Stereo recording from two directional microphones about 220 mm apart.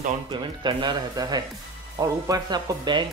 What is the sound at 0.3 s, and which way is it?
Speech, 20° right (ahead or behind).